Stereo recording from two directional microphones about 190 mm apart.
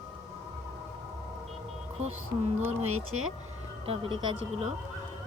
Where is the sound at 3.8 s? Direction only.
30° right (ahead or behind).